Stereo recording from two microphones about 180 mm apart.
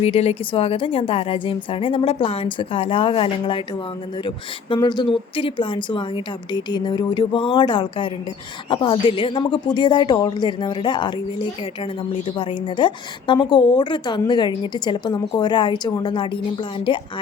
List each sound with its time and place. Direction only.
0.0 s a woman's voice: 35° left (ahead or behind)
4.7 s a woman's voice: 25° left (ahead or behind)